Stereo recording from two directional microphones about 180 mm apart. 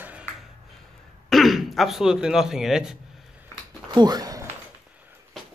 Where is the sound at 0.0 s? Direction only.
10° right (ahead or behind).